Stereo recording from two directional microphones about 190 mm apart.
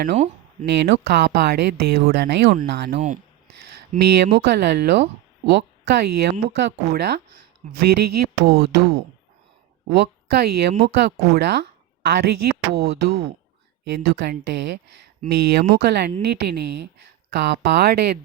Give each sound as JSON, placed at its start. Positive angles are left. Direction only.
{"t": 0.6, "sound": "speech", "side_deg": -65}